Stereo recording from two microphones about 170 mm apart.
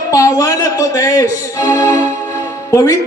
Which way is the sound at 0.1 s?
20° left (ahead or behind).